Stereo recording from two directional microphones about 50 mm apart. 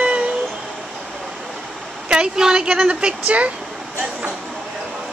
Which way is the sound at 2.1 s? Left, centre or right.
Centre.